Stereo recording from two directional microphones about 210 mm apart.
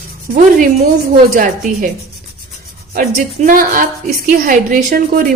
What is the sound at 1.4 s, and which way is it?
Speech, 40° right (ahead or behind).